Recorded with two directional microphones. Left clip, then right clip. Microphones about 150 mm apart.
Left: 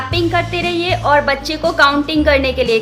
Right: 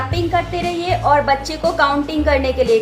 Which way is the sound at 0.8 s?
40° left (ahead or behind).